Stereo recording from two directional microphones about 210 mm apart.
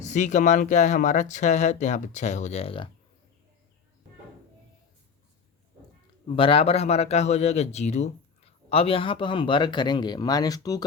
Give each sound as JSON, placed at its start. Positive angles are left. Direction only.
{"t": 0.0, "sound": "speech", "side_deg": 35}
{"t": 6.2, "sound": "a man's voice", "side_deg": 25}